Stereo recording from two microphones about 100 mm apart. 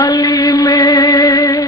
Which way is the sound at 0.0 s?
40° left (ahead or behind).